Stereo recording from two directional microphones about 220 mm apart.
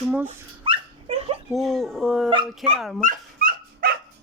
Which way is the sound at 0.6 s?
25° right (ahead or behind).